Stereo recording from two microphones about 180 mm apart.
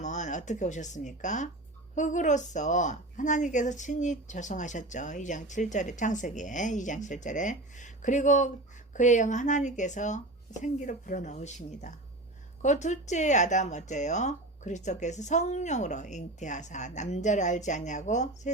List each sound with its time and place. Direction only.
0.0 s a woman's voice: 40° left (ahead or behind)